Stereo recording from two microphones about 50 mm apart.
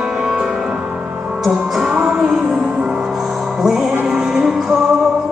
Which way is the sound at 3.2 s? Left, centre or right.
Centre.